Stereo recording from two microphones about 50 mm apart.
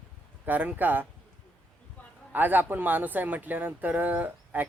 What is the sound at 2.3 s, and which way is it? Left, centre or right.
Speech, right.